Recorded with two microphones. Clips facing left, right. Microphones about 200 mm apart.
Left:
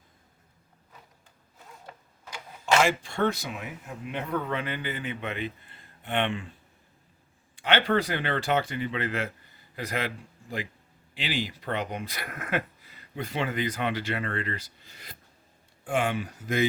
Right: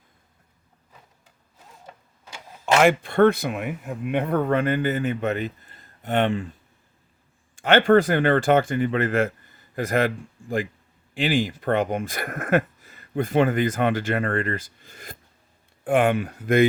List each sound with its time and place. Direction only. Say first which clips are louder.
2.8 s speech: right 9 dB; 60° right (ahead or behind); by 6.5 s 40° right (ahead or behind)
7.5 s speech: right 8 dB; 45° right (ahead or behind)
11.1 s speech: right 9 dB; 50° right (ahead or behind)